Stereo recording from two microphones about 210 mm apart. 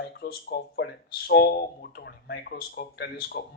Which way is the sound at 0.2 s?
45° left (ahead or behind).